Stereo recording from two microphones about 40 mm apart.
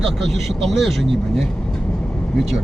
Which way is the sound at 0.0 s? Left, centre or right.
Centre.